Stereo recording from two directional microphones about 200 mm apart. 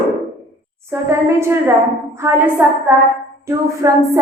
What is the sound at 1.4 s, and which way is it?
A woman's voice, 15° right (ahead or behind).